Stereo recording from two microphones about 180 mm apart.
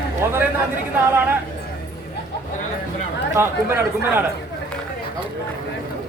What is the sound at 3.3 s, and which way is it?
Speech, 15° right (ahead or behind).